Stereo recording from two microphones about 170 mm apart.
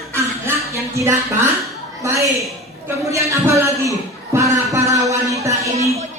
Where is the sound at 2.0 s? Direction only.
15° right (ahead or behind).